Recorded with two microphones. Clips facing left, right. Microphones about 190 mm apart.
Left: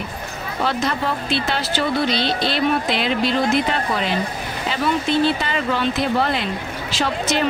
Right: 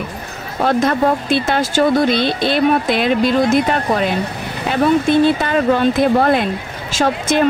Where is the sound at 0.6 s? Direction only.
50° right (ahead or behind).